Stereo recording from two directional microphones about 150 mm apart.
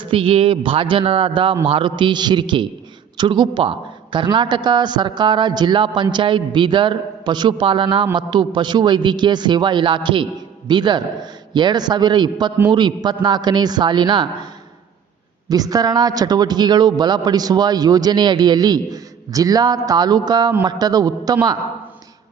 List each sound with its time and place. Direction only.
0.0 s a man's voice: 35° right (ahead or behind)
15.4 s a man's voice: 25° right (ahead or behind)